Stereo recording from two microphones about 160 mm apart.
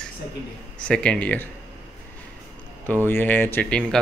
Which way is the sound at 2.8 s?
10° left (ahead or behind).